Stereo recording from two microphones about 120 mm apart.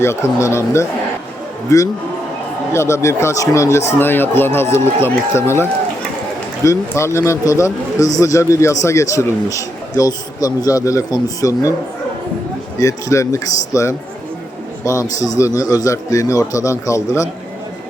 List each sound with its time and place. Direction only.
0.3 s a man's voice: 25° left (ahead or behind)
6.7 s a man's voice: 25° left (ahead or behind)
12.8 s a man's voice: 25° left (ahead or behind)